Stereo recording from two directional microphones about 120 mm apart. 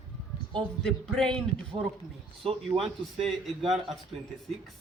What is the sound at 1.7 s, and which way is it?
Speech, 45° right (ahead or behind).